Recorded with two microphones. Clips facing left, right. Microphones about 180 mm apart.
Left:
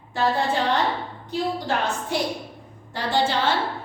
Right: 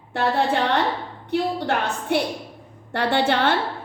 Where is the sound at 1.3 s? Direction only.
65° right (ahead or behind).